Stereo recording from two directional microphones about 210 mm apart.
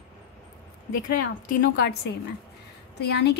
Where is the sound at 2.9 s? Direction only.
50° left (ahead or behind).